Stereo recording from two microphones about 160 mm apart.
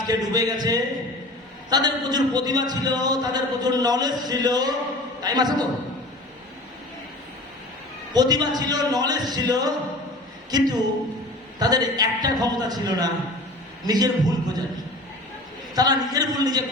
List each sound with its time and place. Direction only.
0.1 s a man's voice: 25° right (ahead or behind)
8.1 s a man's voice: 25° right (ahead or behind)
15.7 s a man's voice: 25° right (ahead or behind)